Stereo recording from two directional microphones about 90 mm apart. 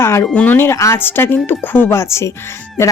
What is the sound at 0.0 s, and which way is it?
Speech, 30° left (ahead or behind).